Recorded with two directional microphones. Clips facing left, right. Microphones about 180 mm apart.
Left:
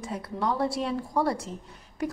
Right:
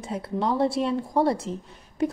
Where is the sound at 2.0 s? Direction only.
25° right (ahead or behind).